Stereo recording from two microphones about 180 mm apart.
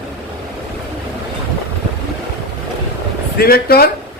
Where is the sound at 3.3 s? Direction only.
60° left (ahead or behind).